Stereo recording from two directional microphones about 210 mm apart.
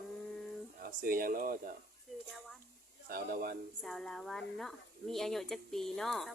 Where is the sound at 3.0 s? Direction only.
45° right (ahead or behind).